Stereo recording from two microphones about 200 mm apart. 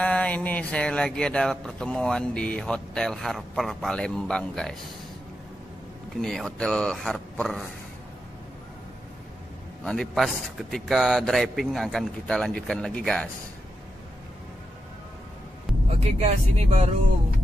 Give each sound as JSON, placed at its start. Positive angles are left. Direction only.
{"t": 0.0, "sound": "speech", "side_deg": 5}
{"t": 6.2, "sound": "speech", "side_deg": 5}
{"t": 9.8, "sound": "speech", "side_deg": 0}
{"t": 16.2, "sound": "speech", "side_deg": -35}